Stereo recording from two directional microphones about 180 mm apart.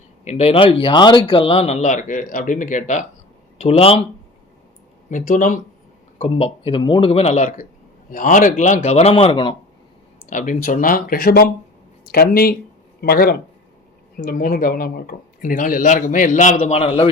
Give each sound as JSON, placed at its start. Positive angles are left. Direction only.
{"t": 0.3, "sound": "speech", "side_deg": 35}
{"t": 5.1, "sound": "speech", "side_deg": 50}
{"t": 6.1, "sound": "speech", "side_deg": 35}
{"t": 10.2, "sound": "speech", "side_deg": 45}